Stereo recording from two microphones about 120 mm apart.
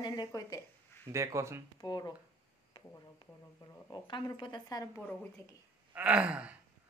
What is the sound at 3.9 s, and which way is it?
Speech, 40° left (ahead or behind).